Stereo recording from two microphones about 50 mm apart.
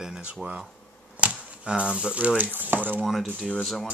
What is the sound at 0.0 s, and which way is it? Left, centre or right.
Speech, centre.